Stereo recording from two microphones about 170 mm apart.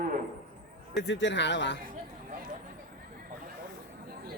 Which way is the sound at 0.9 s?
90° left.